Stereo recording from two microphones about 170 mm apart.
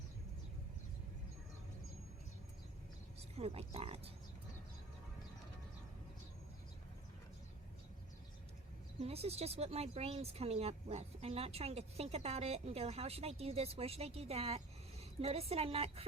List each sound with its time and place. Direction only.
3.2 s speech: 35° right (ahead or behind)
9.0 s speech: 35° right (ahead or behind)